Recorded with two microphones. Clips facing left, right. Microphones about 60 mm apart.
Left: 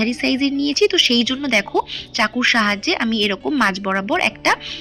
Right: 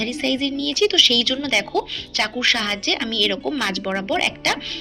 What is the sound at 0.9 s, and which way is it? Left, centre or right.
Speech, left.